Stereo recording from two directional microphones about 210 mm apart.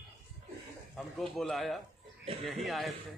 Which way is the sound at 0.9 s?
Centre (ahead or behind).